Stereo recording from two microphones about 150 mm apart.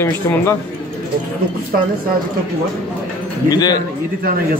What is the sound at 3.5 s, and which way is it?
Speech, 25° left (ahead or behind).